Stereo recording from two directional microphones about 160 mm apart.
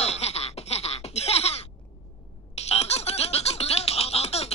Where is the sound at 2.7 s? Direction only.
40° left (ahead or behind).